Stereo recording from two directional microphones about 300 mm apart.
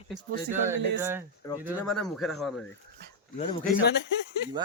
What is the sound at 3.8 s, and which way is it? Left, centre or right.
Speech, left.